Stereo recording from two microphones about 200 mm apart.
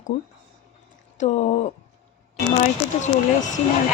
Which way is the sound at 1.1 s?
35° left (ahead or behind).